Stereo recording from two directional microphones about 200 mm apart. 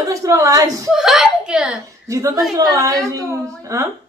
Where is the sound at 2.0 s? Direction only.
15° right (ahead or behind).